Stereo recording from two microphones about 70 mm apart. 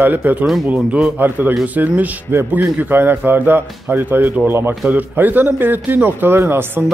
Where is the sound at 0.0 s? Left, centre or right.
Right.